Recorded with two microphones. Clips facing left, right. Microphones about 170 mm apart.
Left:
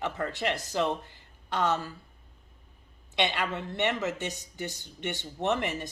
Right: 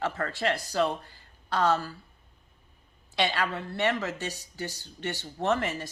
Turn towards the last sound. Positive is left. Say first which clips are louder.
# right 1 dB
turn(degrees=20)  # may be behind; listen again after turning